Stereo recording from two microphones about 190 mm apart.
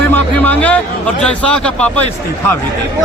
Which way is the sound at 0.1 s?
10° left (ahead or behind).